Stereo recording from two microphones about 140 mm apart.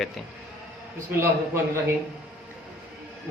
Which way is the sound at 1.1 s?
15° right (ahead or behind).